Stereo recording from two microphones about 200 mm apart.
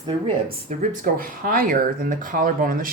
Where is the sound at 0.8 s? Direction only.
45° right (ahead or behind).